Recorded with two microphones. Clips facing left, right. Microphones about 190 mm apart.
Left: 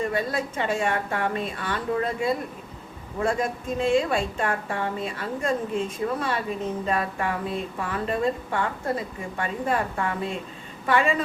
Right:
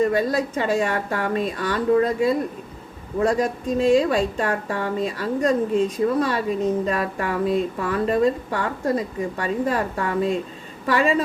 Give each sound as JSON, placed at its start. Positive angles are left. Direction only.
{"t": 0.0, "sound": "speech", "side_deg": -40}